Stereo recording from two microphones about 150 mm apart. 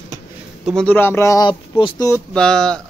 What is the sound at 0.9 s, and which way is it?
Speech, 15° left (ahead or behind).